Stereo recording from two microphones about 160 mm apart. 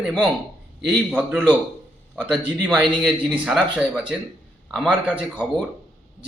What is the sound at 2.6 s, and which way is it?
Speech, 5° right (ahead or behind).